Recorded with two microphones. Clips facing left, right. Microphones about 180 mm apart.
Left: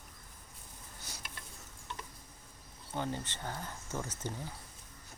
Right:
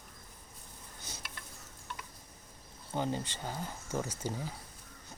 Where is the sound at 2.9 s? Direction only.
15° right (ahead or behind).